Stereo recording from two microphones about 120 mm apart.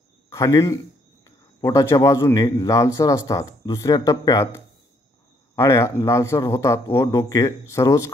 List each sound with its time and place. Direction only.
0.3 s a man's voice: 25° left (ahead or behind)
5.6 s speech: 25° left (ahead or behind)